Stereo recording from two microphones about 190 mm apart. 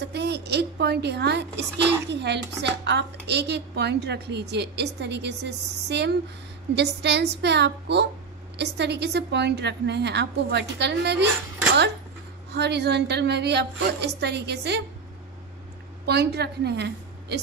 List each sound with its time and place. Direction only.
0.0 s a woman's voice: 60° right (ahead or behind)
12.5 s a woman's voice: 60° right (ahead or behind)
16.1 s a woman's voice: 60° right (ahead or behind)